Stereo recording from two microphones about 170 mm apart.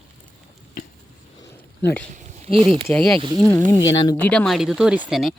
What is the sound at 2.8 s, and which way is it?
Speech, 5° left (ahead or behind).